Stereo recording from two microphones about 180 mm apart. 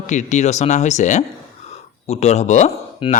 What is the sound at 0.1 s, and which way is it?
Speech, 40° left (ahead or behind).